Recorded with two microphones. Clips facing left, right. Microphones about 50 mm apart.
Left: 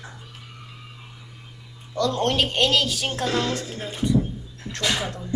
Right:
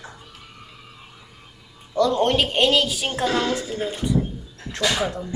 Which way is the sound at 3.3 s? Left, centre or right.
Right.